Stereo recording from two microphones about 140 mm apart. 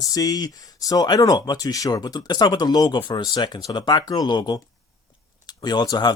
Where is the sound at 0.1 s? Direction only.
25° left (ahead or behind).